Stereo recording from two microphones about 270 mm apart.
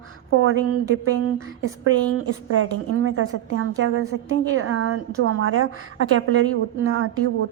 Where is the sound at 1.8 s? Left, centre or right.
Right.